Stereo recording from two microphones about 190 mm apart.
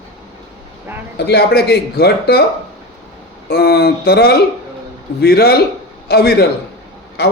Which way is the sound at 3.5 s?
55° left (ahead or behind).